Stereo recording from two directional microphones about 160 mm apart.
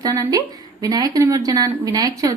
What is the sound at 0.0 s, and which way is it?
A woman's voice, 20° right (ahead or behind).